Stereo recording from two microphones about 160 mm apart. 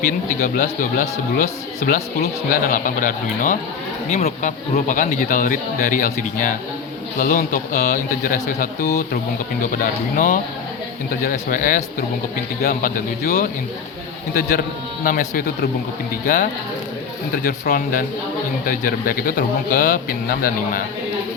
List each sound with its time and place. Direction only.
0.3 s speech: 60° left (ahead or behind)
10.2 s speech: 55° left (ahead or behind)
12.6 s speech: 70° left (ahead or behind)
15.0 s speech: 65° left (ahead or behind)
16.2 s speech: 55° left (ahead or behind); by 20.8 s 70° left (ahead or behind)